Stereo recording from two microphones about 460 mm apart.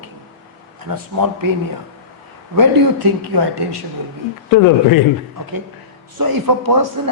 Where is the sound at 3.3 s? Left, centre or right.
Right.